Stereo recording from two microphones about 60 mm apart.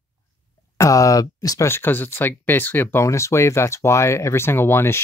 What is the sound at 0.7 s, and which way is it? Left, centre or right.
Speech, left.